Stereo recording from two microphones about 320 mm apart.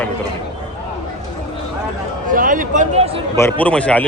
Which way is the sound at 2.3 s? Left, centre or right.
Right.